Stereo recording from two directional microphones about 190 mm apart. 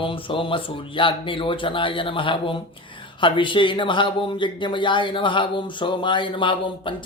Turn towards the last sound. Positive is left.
turn(degrees=25)  # may be behind; listen again after turning